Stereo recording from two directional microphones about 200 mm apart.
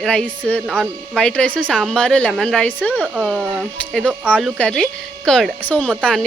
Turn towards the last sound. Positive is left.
turn(degrees=0)  # may be behind; listen again after turning